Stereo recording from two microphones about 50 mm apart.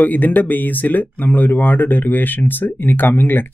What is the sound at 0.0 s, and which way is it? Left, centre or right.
Speech, left.